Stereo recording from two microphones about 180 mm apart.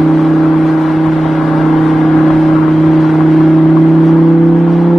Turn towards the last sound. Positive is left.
turn(degrees=0)  # may be behind; listen again after turning